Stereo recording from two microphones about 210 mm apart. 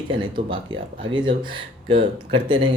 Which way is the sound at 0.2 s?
25° right (ahead or behind).